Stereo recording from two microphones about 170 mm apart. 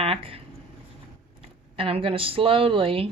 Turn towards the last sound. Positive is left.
turn(degrees=-30)  # may be behind; listen again after turning